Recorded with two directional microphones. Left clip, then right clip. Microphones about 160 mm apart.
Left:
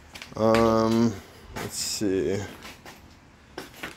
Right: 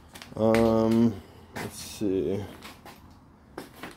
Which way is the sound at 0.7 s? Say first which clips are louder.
Left 1 dB; 20° right (ahead or behind).